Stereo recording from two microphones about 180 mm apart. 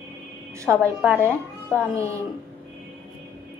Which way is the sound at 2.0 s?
15° right (ahead or behind).